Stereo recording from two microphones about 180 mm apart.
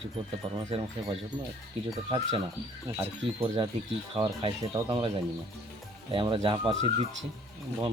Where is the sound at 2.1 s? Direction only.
30° right (ahead or behind).